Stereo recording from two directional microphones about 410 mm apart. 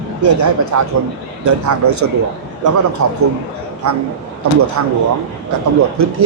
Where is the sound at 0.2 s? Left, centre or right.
Right.